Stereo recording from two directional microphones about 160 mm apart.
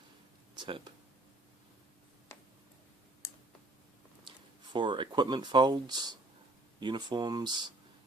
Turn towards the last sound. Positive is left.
turn(degrees=-25)  # may be behind; listen again after turning